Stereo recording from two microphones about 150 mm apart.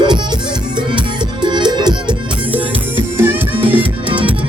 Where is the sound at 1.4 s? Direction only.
30° right (ahead or behind).